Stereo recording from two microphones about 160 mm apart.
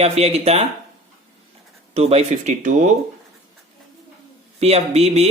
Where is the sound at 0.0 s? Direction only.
40° right (ahead or behind).